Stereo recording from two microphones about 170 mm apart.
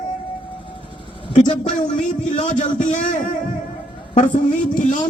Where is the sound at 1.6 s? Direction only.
45° left (ahead or behind).